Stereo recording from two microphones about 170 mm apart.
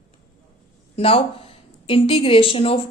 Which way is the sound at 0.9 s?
35° left (ahead or behind).